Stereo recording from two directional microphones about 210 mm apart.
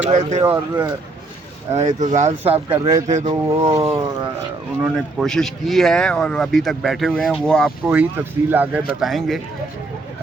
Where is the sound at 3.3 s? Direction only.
20° right (ahead or behind).